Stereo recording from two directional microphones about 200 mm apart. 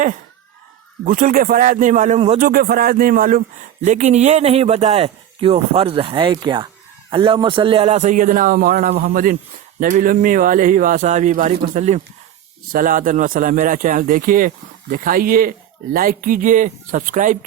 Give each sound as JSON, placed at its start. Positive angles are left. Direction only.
{"t": 1.0, "sound": "a man's voice", "side_deg": -45}
{"t": 2.4, "sound": "a man's voice", "side_deg": -50}